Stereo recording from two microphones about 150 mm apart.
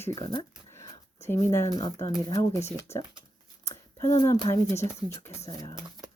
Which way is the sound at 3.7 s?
20° left (ahead or behind).